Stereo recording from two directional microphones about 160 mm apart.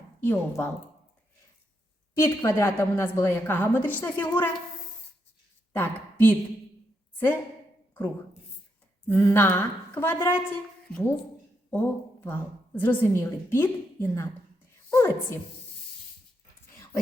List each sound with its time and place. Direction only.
0.2 s a woman's voice: 10° left (ahead or behind)
2.1 s a woman's voice: 15° left (ahead or behind)
5.7 s speech: 15° left (ahead or behind)
9.0 s a woman's voice: 15° left (ahead or behind)